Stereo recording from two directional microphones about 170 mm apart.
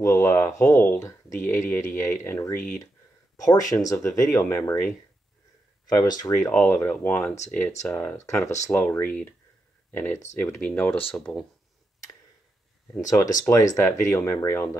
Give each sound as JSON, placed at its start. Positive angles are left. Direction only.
{"t": 0.0, "sound": "speech", "side_deg": 15}
{"t": 5.9, "sound": "speech", "side_deg": 20}
{"t": 6.5, "sound": "speech", "side_deg": 10}
{"t": 13.0, "sound": "speech", "side_deg": 20}